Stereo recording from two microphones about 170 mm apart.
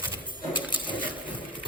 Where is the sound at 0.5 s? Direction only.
30° left (ahead or behind).